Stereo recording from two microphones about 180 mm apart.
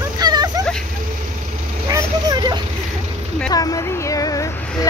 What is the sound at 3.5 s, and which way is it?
Speech, 20° left (ahead or behind).